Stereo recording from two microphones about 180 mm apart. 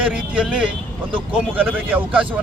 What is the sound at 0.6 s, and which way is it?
Speech, 30° right (ahead or behind).